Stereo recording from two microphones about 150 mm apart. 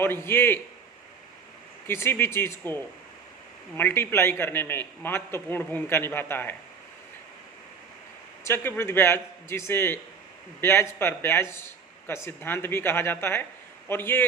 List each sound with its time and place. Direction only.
0.0 s a man's voice: 15° left (ahead or behind)
1.9 s a man's voice: 15° left (ahead or behind)
3.8 s a man's voice: 15° left (ahead or behind)
8.4 s a man's voice: 15° left (ahead or behind)